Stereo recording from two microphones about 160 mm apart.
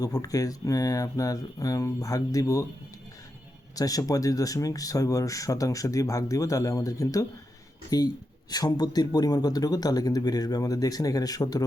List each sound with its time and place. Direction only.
0.0 s speech: 25° left (ahead or behind)
3.8 s speech: 20° left (ahead or behind)